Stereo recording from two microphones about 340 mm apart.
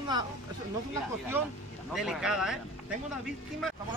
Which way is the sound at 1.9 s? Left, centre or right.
Centre.